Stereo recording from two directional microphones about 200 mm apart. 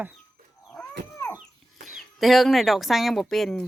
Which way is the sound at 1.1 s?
15° left (ahead or behind).